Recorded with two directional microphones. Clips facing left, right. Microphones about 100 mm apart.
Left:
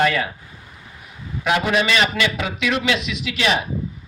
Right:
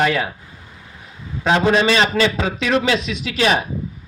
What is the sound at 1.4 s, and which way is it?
A man's voice, 30° right (ahead or behind).